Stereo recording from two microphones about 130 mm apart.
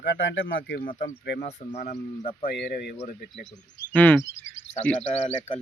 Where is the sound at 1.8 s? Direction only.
65° left (ahead or behind).